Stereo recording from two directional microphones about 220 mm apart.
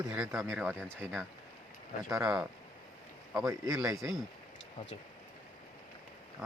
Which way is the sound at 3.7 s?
15° right (ahead or behind).